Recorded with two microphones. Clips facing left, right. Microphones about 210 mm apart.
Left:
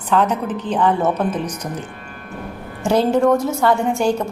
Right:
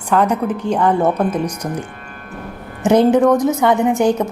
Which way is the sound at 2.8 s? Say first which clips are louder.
Right 4 dB; 20° right (ahead or behind).